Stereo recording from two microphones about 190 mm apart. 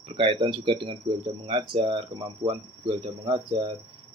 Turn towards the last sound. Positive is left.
turn(degrees=-25)  # may be behind; listen again after turning